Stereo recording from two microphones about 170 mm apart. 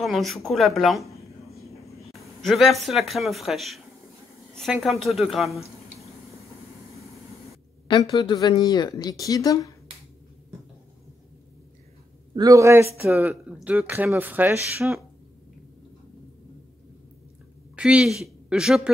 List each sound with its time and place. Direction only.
0.0 s a woman's voice: centre (ahead or behind)
7.9 s speech: 30° left (ahead or behind)
12.4 s speech: 20° right (ahead or behind)
17.7 s speech: 5° right (ahead or behind)